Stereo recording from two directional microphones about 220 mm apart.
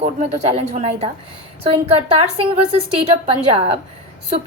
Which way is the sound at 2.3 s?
25° right (ahead or behind).